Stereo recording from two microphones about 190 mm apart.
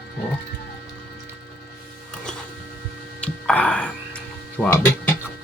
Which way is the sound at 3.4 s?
5° left (ahead or behind).